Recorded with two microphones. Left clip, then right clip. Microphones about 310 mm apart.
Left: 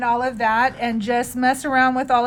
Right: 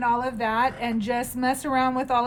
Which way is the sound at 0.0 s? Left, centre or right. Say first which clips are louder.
Left 4 dB; centre.